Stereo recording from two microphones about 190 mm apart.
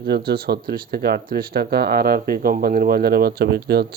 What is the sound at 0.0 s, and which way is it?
Speech, 55° right (ahead or behind).